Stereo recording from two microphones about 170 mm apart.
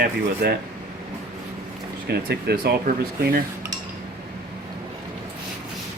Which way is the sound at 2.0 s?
70° right (ahead or behind).